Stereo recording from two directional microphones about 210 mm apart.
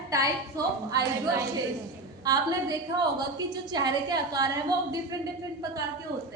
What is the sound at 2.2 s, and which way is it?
A woman's voice, 15° right (ahead or behind).